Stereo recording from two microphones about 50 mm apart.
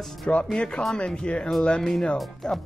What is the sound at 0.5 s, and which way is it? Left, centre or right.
Speech, centre.